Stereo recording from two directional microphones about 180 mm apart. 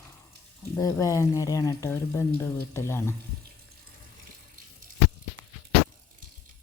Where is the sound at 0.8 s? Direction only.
15° left (ahead or behind).